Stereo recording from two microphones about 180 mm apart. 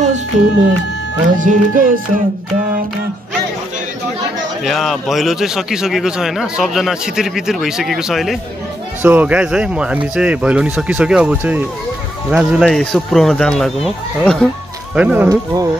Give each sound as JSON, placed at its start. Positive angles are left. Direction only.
{"t": 0.0, "sound": "a sound", "side_deg": -40}
{"t": 1.2, "sound": "speech", "side_deg": -45}
{"t": 4.6, "sound": "a man's voice", "side_deg": 0}
{"t": 15.2, "sound": "speech", "side_deg": -20}